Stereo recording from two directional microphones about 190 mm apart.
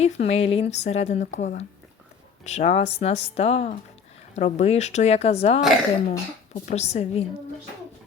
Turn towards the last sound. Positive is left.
turn(degrees=35)  # may be behind; listen again after turning